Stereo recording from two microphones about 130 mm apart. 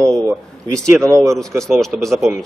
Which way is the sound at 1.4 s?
5° left (ahead or behind).